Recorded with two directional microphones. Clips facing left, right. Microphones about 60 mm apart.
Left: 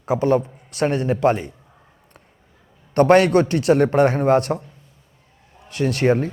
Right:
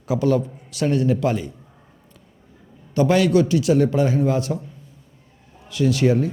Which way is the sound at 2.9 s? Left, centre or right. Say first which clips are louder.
Left 3 dB; left.